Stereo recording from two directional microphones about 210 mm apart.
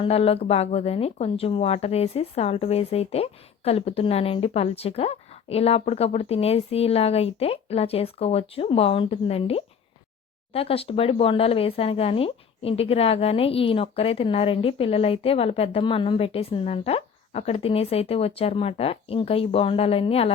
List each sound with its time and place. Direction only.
0.0 s speech: 30° left (ahead or behind)